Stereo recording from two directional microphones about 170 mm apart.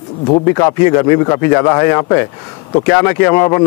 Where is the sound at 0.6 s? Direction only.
20° left (ahead or behind).